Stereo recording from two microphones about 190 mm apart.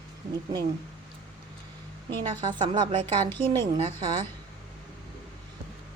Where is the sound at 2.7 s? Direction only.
25° right (ahead or behind).